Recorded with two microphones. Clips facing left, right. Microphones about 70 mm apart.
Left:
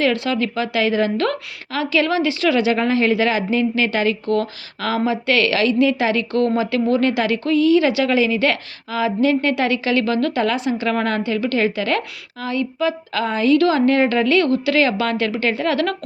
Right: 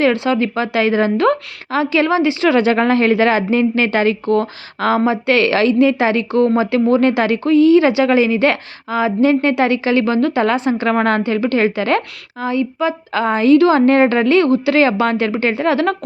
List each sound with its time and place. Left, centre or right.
0.0 s speech: right
1.1 s a woman's voice: centre
2.6 s a woman's voice: right
10.4 s a woman's voice: right